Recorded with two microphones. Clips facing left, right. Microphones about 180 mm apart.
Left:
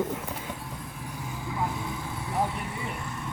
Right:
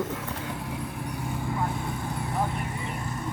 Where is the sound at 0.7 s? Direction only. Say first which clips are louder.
Right 5 dB; 65° right (ahead or behind).